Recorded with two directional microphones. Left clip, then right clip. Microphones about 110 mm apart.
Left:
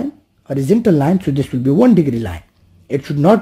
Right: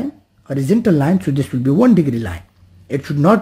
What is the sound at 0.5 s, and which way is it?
Speech, 15° left (ahead or behind).